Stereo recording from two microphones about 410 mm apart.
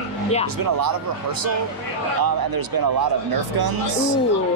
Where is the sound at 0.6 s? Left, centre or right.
Right.